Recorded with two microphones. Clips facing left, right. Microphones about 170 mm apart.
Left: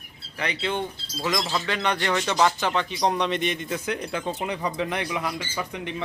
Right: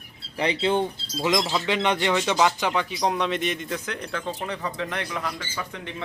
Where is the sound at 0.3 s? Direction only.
30° right (ahead or behind).